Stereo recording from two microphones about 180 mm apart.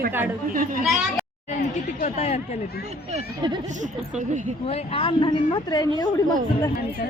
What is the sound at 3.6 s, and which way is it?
Speech, 45° right (ahead or behind).